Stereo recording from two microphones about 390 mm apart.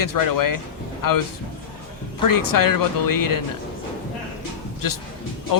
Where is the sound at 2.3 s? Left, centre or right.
Left.